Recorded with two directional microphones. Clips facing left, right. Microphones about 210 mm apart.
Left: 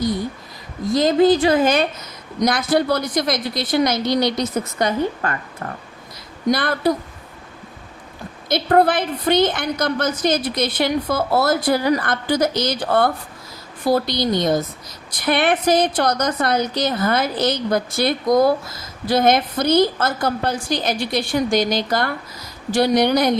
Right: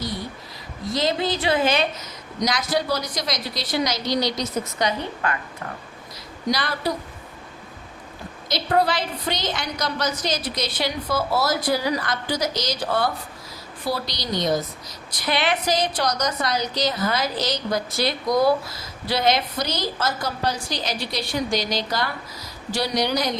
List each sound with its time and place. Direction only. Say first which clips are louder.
0.9 s a woman's voice: left 9 dB; 45° left (ahead or behind)
6.5 s a woman's voice: left 6 dB; 55° left (ahead or behind)
8.4 s a woman's voice: left 6 dB; 55° left (ahead or behind)